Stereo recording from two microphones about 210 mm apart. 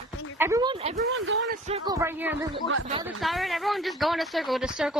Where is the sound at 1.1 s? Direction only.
65° right (ahead or behind).